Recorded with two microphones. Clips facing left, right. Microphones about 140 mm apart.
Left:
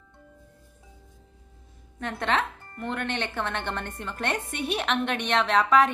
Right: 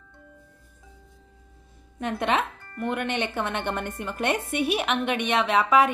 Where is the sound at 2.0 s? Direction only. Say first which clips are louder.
Right 2 dB; 15° right (ahead or behind).